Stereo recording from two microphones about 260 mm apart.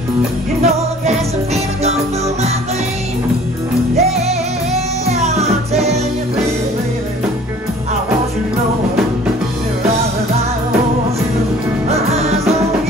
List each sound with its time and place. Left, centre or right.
0.6 s music: right
3.9 s music: right
11.9 s music: right